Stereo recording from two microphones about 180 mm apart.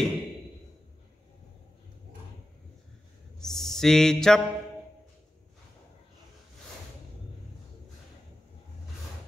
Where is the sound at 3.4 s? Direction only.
Centre (ahead or behind).